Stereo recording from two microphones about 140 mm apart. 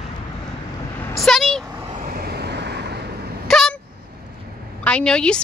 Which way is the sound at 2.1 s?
90° right.